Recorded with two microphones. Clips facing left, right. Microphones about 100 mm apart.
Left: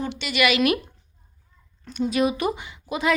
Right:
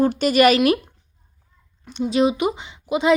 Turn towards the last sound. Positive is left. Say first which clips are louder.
# right 5 dB
turn(degrees=-20)  # may be behind; listen again after turning